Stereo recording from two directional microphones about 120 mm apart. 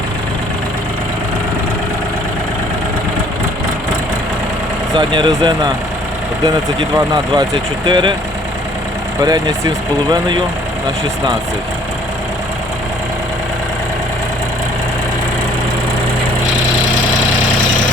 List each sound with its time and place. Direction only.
4.9 s speech: 40° right (ahead or behind)
6.9 s speech: 30° right (ahead or behind)
9.2 s speech: 35° right (ahead or behind)